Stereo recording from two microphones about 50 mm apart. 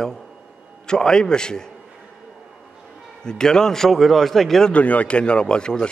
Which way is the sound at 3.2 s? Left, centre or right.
Centre.